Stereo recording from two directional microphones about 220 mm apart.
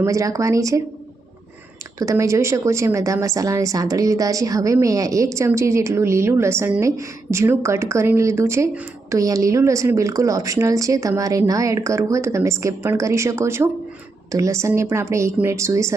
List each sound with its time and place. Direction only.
0.0 s a woman's voice: 15° right (ahead or behind)
2.0 s a woman's voice: 15° right (ahead or behind)